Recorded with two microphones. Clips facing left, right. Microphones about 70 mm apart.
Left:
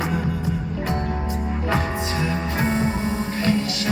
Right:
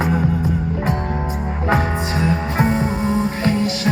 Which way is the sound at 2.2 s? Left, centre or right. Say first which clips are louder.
Right 6 dB; right.